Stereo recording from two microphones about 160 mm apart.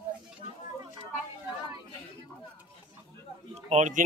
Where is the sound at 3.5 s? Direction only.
45° right (ahead or behind).